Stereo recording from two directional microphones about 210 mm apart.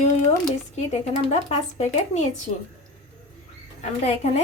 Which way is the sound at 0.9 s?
30° left (ahead or behind).